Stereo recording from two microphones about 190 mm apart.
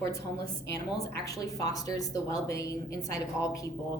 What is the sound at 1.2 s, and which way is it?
A woman's voice, 20° left (ahead or behind).